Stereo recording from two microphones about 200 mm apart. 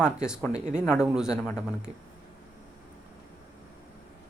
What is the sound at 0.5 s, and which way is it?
Speech, 35° right (ahead or behind).